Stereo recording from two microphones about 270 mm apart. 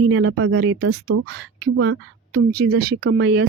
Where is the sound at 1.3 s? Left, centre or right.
Right.